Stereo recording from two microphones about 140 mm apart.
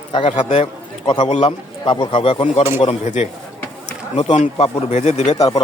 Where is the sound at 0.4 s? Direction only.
40° left (ahead or behind).